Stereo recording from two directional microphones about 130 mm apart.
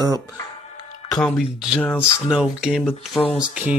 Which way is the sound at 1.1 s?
5° left (ahead or behind).